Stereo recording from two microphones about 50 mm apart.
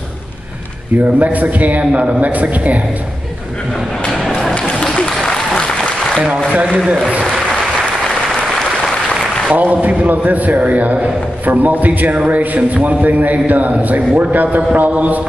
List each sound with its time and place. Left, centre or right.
0.9 s a man's voice: right
4.8 s applause: centre
6.7 s a man's voice: centre
9.6 s a man's voice: right